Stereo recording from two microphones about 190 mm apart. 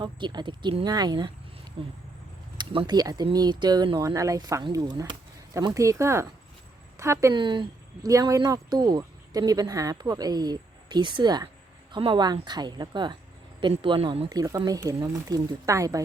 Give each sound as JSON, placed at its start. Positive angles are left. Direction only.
{"t": 0.0, "sound": "speech", "side_deg": -25}